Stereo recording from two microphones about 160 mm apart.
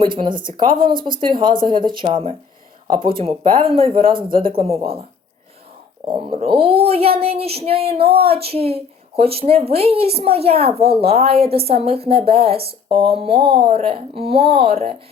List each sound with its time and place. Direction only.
0.0 s a woman's voice: 30° right (ahead or behind)
6.1 s a woman's voice: 35° right (ahead or behind)